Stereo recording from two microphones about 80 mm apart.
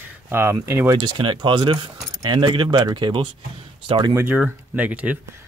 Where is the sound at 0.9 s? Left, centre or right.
Right.